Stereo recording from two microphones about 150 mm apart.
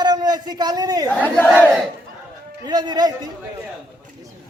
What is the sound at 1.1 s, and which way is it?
Speech, 10° left (ahead or behind).